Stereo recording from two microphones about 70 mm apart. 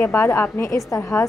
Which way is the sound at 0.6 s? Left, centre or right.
Left.